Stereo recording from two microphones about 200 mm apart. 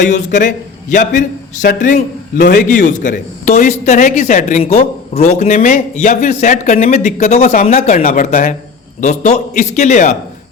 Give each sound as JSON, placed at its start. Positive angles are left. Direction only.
{"t": 0.1, "sound": "a man's voice", "side_deg": 40}